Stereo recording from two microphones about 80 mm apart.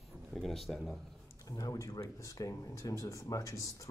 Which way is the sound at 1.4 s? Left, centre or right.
Left.